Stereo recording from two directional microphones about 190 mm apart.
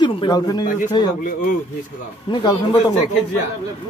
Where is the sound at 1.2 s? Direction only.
45° left (ahead or behind).